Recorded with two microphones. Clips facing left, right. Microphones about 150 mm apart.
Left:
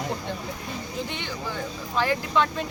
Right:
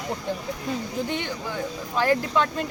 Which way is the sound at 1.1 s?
50° right (ahead or behind).